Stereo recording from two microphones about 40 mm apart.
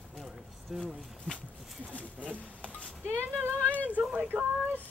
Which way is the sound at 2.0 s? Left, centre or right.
Right.